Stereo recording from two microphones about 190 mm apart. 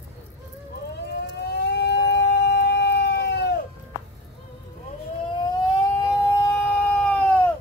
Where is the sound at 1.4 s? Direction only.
60° left (ahead or behind).